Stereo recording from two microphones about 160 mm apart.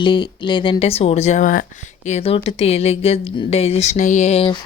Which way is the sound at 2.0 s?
40° left (ahead or behind).